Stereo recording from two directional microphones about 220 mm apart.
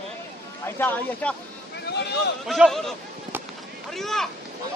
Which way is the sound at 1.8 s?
50° left (ahead or behind).